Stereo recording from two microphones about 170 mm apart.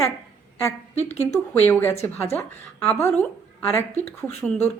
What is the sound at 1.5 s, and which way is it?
Speech, 15° left (ahead or behind).